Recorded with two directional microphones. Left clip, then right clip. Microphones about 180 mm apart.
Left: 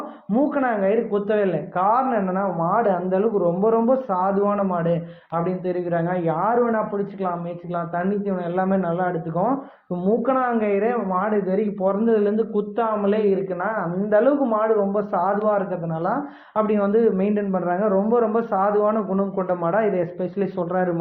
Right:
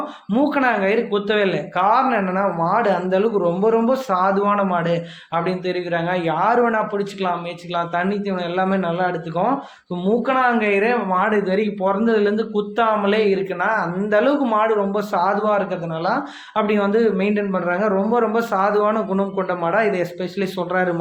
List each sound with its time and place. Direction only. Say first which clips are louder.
0.3 s speech: right 3 dB; 15° right (ahead or behind)
16.6 s speech: right 1 dB; 10° right (ahead or behind)